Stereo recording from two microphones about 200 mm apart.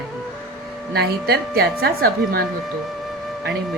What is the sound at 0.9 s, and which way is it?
A woman's voice, 50° right (ahead or behind).